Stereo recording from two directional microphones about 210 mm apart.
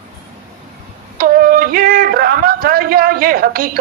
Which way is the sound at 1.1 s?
45° right (ahead or behind).